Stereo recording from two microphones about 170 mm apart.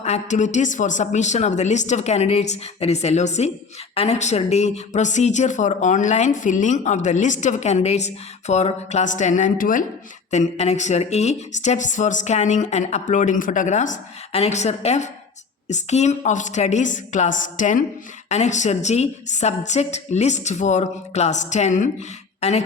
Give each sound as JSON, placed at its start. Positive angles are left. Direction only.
{"t": 0.0, "sound": "speech", "side_deg": 40}
{"t": 22.4, "sound": "throat clearing", "side_deg": 40}